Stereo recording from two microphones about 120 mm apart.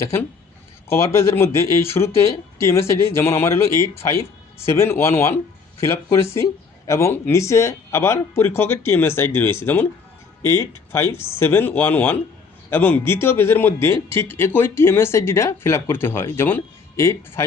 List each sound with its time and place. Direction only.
0.0 s a man's voice: 20° left (ahead or behind)